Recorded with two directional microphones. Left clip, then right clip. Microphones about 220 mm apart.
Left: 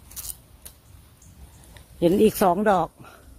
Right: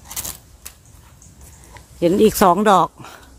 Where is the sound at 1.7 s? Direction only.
10° left (ahead or behind).